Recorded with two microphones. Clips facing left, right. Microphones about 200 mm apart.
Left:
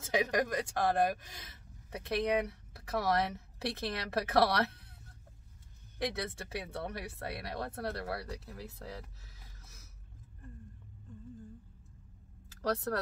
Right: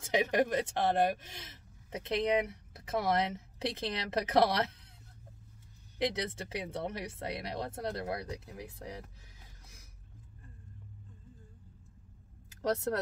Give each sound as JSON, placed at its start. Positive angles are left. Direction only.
{"t": 0.0, "sound": "speech", "side_deg": -20}
{"t": 5.9, "sound": "speech", "side_deg": -20}
{"t": 12.4, "sound": "speech", "side_deg": -20}